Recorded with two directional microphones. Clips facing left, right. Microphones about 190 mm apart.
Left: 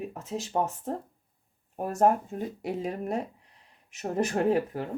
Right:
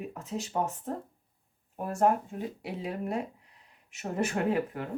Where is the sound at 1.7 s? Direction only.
40° left (ahead or behind).